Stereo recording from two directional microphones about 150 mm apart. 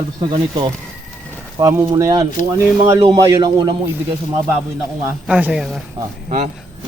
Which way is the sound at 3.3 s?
30° right (ahead or behind).